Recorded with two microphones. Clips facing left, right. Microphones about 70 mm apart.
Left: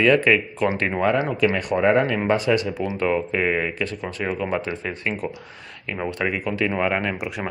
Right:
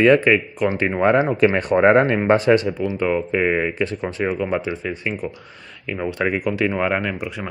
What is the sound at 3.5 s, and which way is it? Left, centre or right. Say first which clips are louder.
Speech: right 3 dB; centre.